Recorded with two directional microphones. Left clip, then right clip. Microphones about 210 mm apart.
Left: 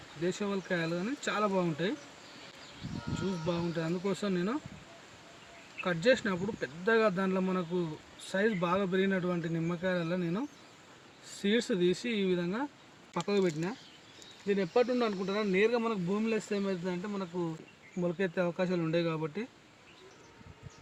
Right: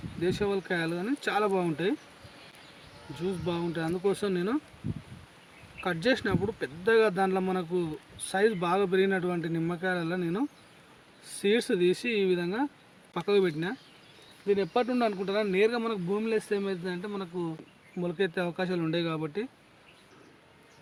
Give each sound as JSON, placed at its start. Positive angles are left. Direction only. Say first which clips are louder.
{"t": 0.2, "sound": "speech", "louder": "right 5 dB", "side_deg": -55}
{"t": 3.4, "sound": "speech", "louder": "right 2 dB", "side_deg": -55}
{"t": 5.8, "sound": "speech", "louder": "even", "side_deg": -55}
{"t": 11.4, "sound": "speech", "louder": "right 4 dB", "side_deg": -60}